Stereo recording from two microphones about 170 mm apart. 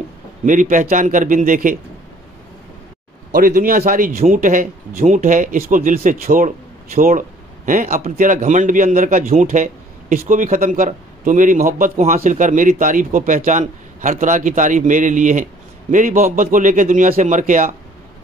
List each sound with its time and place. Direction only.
0.5 s speech: 50° right (ahead or behind)
3.3 s speech: 60° right (ahead or behind)